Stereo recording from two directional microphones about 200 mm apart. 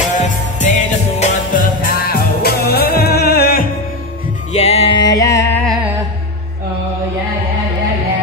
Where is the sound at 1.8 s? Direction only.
50° left (ahead or behind).